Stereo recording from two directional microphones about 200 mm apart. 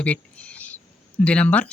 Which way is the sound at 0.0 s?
5° left (ahead or behind).